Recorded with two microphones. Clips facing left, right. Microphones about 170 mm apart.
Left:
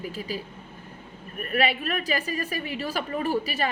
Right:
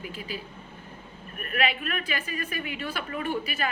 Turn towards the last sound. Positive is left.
turn(degrees=35)  # may be behind; listen again after turning